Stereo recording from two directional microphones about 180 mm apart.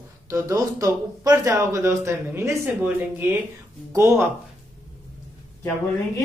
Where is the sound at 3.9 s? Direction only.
15° right (ahead or behind).